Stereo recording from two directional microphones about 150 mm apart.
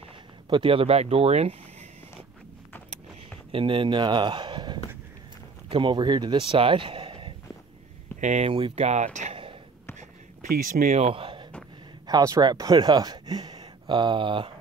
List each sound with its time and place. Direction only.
0.5 s speech: 35° right (ahead or behind)
3.5 s speech: 35° right (ahead or behind)
8.2 s speech: 50° right (ahead or behind)
10.5 s speech: 65° right (ahead or behind); by 11.4 s 35° right (ahead or behind)
12.1 s speech: 25° right (ahead or behind)